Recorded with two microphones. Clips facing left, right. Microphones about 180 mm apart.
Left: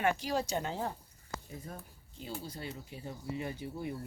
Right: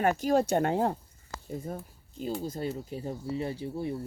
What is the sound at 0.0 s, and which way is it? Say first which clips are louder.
Speech: right 7 dB; 45° right (ahead or behind).